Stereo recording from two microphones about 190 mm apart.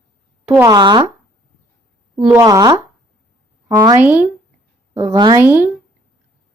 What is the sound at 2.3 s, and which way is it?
A woman's voice, 15° right (ahead or behind).